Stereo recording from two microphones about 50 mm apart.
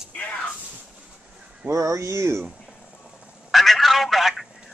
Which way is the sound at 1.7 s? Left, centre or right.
Right.